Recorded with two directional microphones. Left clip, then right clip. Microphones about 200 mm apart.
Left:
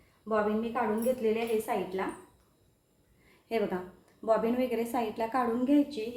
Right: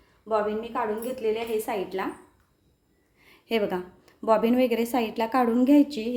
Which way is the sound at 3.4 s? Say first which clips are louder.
Right 5 dB; 50° right (ahead or behind).